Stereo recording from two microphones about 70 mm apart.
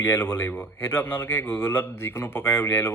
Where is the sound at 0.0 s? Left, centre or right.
Left.